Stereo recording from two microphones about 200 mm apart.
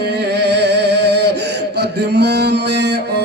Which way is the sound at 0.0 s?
55° right (ahead or behind).